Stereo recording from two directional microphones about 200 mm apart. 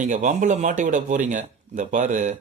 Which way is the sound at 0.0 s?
40° right (ahead or behind).